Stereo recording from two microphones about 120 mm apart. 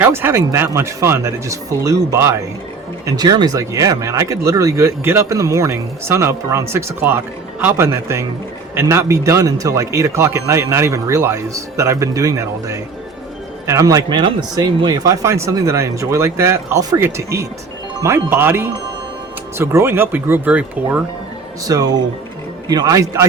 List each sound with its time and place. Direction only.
0.0 s speech: 20° right (ahead or behind)
21.7 s speech: 35° right (ahead or behind)